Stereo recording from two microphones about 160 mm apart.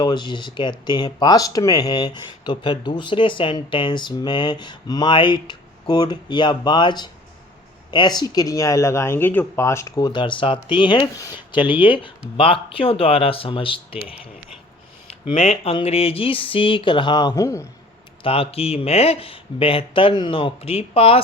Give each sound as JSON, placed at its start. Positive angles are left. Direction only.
{"t": 0.0, "sound": "speech", "side_deg": 30}
{"t": 15.3, "sound": "speech", "side_deg": 40}
{"t": 18.2, "sound": "speech", "side_deg": 35}